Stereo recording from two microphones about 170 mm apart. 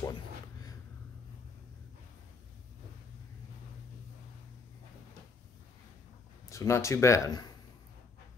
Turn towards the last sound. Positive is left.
turn(degrees=20)  # may be behind; listen again after turning